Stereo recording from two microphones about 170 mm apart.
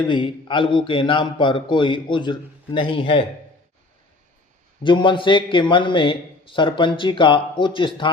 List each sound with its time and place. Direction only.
0.0 s a man's voice: 30° left (ahead or behind)
4.8 s a man's voice: 30° left (ahead or behind)